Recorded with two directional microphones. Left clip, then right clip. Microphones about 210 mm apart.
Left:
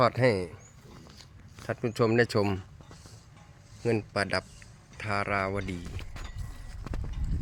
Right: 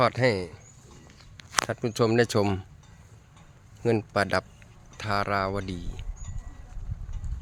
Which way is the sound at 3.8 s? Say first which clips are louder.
Right 4 dB; 20° right (ahead or behind).